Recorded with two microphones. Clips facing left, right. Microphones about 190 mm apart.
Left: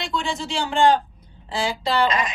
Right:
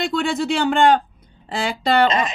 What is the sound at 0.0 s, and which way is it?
Speech, 55° right (ahead or behind).